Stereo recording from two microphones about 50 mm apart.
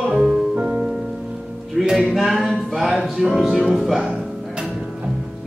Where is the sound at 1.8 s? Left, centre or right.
Centre.